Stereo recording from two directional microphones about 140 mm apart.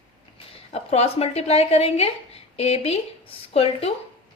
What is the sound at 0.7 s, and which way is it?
Speech, 50° left (ahead or behind).